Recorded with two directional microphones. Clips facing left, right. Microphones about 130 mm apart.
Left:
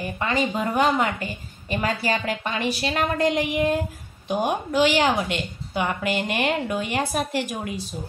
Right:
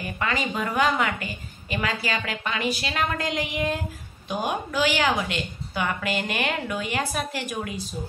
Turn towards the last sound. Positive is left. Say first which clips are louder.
# left 1 dB
turn(degrees=30)  # may be behind; listen again after turning